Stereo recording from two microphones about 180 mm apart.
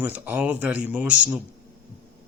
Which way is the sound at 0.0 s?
10° right (ahead or behind).